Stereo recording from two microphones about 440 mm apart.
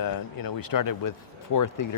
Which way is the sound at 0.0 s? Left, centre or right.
Left.